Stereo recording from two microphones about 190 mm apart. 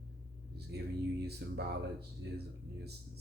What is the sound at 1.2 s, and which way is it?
Speech, 60° right (ahead or behind).